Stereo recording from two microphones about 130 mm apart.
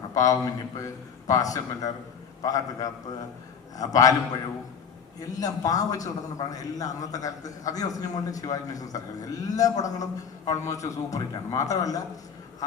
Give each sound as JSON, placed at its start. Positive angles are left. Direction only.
{"t": 0.1, "sound": "a man's voice", "side_deg": 25}
{"t": 5.3, "sound": "a man's voice", "side_deg": 30}